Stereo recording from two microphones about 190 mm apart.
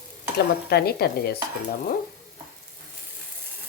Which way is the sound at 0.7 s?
55° left (ahead or behind).